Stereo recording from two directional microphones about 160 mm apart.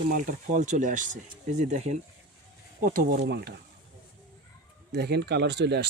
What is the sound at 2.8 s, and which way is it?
Speech, 65° right (ahead or behind).